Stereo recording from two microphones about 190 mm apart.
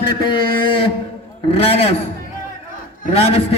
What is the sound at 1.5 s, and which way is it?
Speech, 30° left (ahead or behind).